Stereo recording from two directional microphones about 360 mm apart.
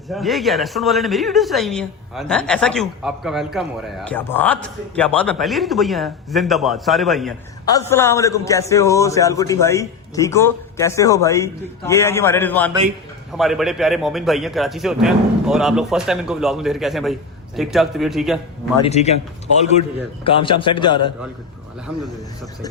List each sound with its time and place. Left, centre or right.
0.1 s a man's voice: centre
18.8 s a man's voice: centre
20.2 s a man's voice: centre